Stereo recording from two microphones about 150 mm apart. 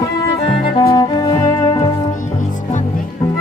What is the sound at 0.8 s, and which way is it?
Music, 30° left (ahead or behind).